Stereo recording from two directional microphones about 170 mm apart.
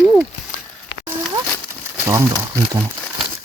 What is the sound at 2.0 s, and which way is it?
Speech, 15° right (ahead or behind).